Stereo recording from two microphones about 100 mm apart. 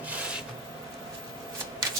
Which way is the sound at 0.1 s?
10° right (ahead or behind).